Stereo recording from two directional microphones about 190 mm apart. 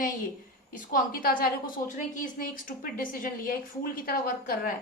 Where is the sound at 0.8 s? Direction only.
45° left (ahead or behind).